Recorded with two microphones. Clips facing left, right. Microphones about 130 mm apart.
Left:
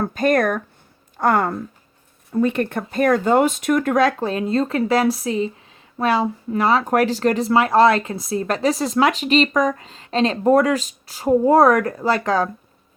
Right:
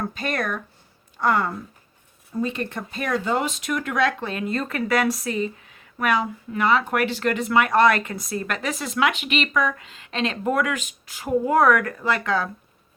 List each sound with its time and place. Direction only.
0.0 s speech: 45° left (ahead or behind)